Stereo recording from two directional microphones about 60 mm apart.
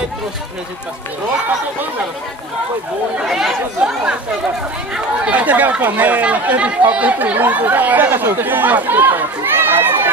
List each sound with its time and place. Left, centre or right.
3.3 s speech: centre
5.3 s speech: right
9.4 s run: right